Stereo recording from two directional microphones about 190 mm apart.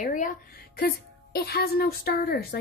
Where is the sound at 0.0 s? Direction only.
45° left (ahead or behind).